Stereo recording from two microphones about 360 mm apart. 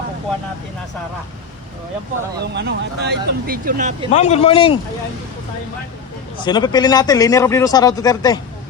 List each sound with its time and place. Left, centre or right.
2.4 s speech: right
4.1 s a man's voice: centre
6.4 s a man's voice: centre